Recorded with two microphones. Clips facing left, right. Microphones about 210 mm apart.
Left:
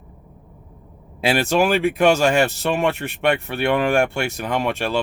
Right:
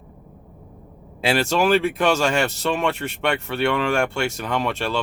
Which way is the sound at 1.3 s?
15° left (ahead or behind).